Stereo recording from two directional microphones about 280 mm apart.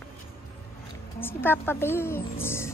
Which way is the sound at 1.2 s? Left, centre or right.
Centre.